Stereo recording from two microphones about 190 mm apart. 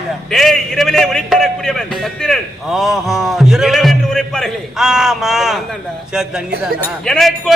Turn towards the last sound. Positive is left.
turn(degrees=0)  # may be behind; listen again after turning